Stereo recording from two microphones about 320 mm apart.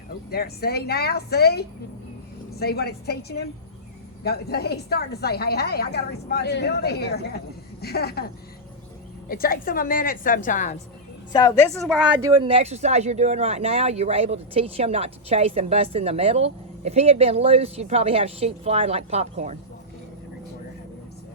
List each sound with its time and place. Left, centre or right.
0.3 s a woman's voice: left
9.3 s a woman's voice: left
11.3 s a woman's voice: centre
11.9 s speech: centre; by 19.5 s right